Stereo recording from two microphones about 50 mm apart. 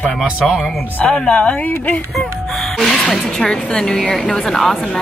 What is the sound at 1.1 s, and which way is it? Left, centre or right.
Speech, centre.